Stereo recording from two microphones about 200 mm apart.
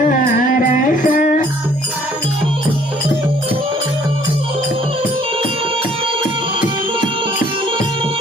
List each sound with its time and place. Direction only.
0.6 s music: 45° left (ahead or behind)